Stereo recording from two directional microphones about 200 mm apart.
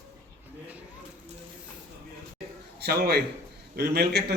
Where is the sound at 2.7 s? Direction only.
55° right (ahead or behind).